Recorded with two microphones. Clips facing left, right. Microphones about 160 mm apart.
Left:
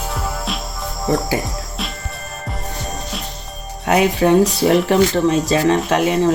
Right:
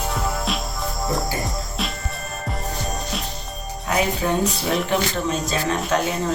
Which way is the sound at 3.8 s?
75° left (ahead or behind).